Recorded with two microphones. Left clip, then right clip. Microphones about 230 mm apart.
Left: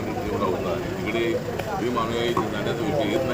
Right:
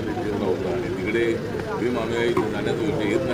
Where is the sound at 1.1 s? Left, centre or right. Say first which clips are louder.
Right 1 dB; centre.